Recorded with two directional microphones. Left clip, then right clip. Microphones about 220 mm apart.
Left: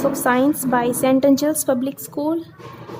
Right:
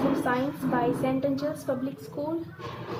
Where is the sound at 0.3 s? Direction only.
50° left (ahead or behind).